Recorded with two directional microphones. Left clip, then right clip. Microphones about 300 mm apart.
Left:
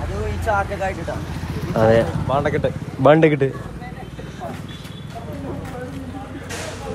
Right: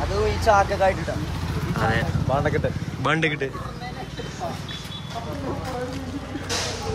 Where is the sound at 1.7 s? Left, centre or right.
Centre.